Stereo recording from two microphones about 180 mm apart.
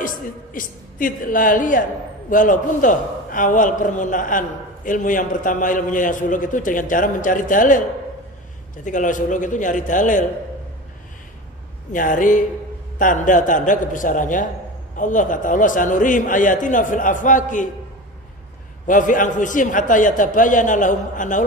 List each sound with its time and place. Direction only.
0.0 s a woman's voice: 50° left (ahead or behind)
8.8 s a woman's voice: 45° left (ahead or behind)
11.9 s a woman's voice: 45° left (ahead or behind)
18.9 s a woman's voice: 45° left (ahead or behind)